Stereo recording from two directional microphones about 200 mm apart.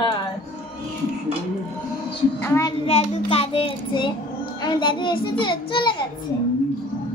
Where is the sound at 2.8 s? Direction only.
30° left (ahead or behind).